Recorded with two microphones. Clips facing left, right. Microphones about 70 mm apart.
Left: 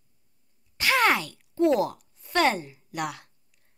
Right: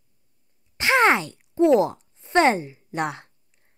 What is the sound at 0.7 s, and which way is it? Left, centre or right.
A woman's voice, right.